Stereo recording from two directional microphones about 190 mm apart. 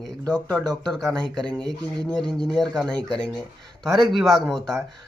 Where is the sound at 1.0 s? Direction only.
20° right (ahead or behind).